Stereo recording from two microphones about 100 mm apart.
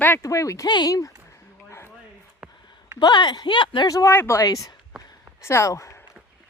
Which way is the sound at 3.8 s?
35° left (ahead or behind).